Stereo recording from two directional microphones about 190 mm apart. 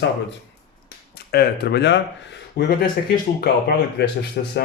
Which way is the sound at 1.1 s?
55° left (ahead or behind).